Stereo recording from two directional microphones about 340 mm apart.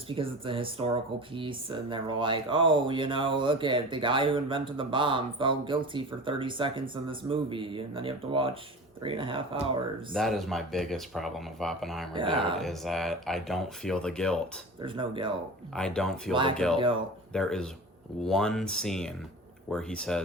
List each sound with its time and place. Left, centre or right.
0.1 s speech: centre
10.2 s speech: centre
12.1 s speech: centre
12.5 s speech: centre
14.8 s speech: centre
15.7 s speech: centre
16.3 s speech: centre
17.3 s speech: centre